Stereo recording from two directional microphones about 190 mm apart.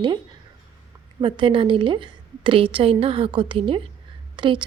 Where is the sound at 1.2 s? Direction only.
25° right (ahead or behind).